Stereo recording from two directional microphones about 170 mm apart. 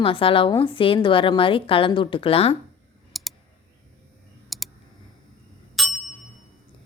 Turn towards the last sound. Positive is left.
turn(degrees=0)  # may be behind; listen again after turning